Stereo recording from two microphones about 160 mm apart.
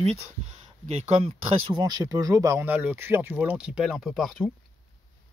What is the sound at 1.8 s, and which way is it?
Speech, 25° right (ahead or behind).